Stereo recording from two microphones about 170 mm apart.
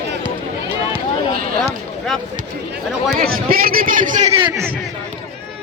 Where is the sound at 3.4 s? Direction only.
60° right (ahead or behind).